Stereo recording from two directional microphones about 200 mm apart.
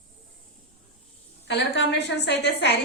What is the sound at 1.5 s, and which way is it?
A woman's voice, 60° left (ahead or behind).